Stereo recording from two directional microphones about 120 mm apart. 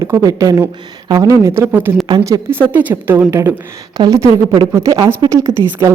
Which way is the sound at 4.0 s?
30° right (ahead or behind).